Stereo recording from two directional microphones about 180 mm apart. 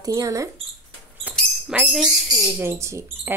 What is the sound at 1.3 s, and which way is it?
Owl, 10° right (ahead or behind).